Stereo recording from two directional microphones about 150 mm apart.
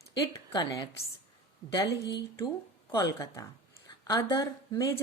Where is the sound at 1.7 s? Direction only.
25° left (ahead or behind).